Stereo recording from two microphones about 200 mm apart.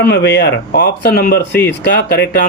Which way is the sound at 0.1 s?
55° left (ahead or behind).